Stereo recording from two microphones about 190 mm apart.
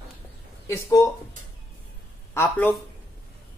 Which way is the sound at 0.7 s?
15° left (ahead or behind).